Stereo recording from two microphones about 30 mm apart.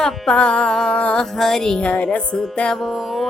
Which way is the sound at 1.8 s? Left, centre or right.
Left.